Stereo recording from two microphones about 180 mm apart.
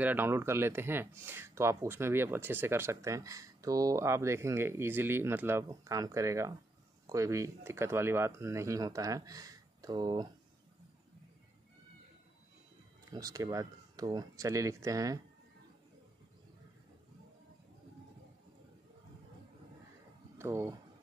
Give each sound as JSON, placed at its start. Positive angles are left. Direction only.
{"t": 0.0, "sound": "speech", "side_deg": -10}
{"t": 13.1, "sound": "speech", "side_deg": -20}
{"t": 20.3, "sound": "speech", "side_deg": -15}